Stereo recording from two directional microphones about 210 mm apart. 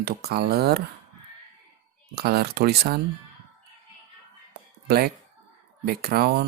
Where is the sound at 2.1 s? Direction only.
50° right (ahead or behind).